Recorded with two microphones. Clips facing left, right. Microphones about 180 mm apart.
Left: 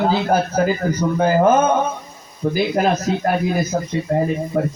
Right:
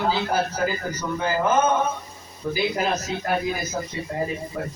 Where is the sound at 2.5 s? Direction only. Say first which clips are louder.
Left 5 dB; 55° left (ahead or behind).